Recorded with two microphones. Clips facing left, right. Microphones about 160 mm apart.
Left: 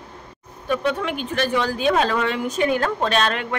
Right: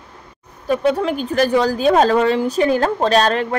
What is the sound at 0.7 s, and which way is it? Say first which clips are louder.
Speech: right 5 dB; 35° right (ahead or behind).